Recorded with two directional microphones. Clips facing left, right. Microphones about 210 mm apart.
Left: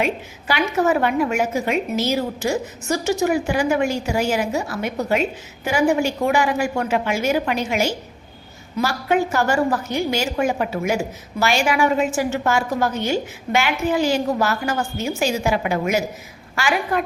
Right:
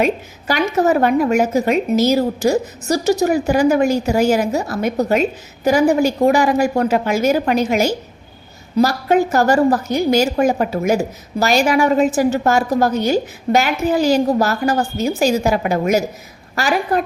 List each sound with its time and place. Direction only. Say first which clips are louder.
0.0 s a woman's voice: right 5 dB; 40° right (ahead or behind)